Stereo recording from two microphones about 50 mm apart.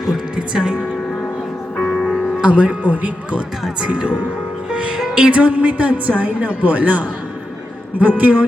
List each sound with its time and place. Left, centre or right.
0.3 s speech: centre
1.7 s music: left
2.0 s music: centre
2.4 s a woman's voice: right
3.8 s a woman's voice: centre